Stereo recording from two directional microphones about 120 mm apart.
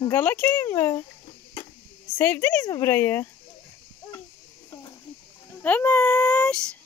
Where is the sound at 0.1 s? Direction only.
15° left (ahead or behind).